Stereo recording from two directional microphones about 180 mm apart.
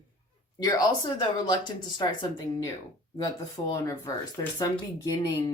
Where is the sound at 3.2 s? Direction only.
20° left (ahead or behind).